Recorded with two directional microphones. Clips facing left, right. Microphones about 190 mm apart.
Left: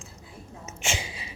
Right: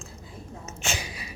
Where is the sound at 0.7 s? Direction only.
20° left (ahead or behind).